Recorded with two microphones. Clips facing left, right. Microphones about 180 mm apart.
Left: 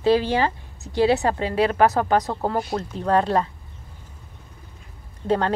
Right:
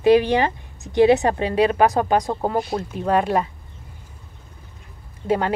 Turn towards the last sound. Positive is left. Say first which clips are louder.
# even
turn(degrees=-10)  # may be behind; listen again after turning